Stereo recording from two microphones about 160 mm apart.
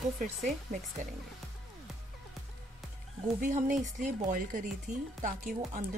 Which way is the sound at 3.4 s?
55° right (ahead or behind).